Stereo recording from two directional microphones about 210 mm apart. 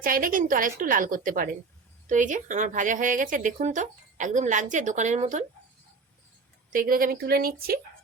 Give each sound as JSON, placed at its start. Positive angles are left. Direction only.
{"t": 0.0, "sound": "speech", "side_deg": -40}
{"t": 6.7, "sound": "speech", "side_deg": -40}